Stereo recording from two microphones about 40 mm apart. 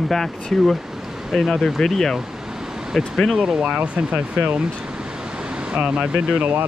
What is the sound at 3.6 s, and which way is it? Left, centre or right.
Speech, right.